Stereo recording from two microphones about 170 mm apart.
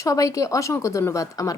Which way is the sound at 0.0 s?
20° left (ahead or behind).